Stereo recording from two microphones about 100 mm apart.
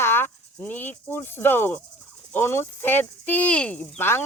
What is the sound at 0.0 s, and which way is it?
Cricket, 20° left (ahead or behind).